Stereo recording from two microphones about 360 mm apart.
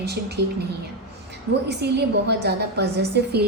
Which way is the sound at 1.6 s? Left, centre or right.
Right.